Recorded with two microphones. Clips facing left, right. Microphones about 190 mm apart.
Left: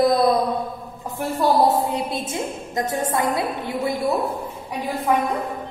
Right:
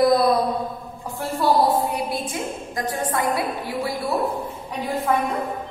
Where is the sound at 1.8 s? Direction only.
25° left (ahead or behind).